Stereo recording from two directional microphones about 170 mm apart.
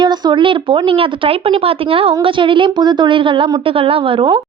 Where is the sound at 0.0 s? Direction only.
25° right (ahead or behind).